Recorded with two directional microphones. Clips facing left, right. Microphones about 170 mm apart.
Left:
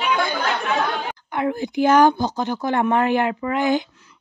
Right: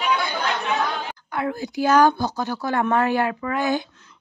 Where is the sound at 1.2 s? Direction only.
20° left (ahead or behind).